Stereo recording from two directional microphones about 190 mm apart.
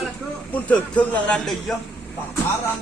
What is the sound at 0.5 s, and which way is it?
Speech, 5° left (ahead or behind).